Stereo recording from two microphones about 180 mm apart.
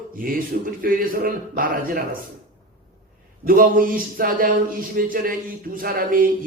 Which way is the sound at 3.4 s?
50° right (ahead or behind).